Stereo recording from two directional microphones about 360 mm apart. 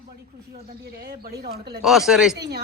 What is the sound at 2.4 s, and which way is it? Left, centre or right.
Speech, right.